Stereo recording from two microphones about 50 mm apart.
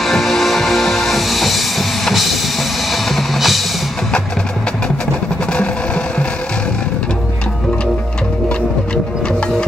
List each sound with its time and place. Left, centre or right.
0.0 s music: centre